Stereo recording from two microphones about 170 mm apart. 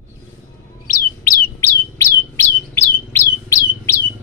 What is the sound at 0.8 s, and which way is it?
Chirp, 55° left (ahead or behind).